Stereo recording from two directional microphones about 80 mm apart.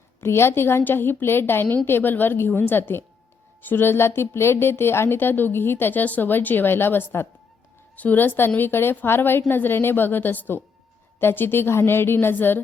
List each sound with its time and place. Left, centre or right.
0.2 s a woman's voice: left